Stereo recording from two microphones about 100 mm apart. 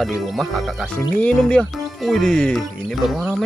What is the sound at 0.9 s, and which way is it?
Speech, 10° left (ahead or behind).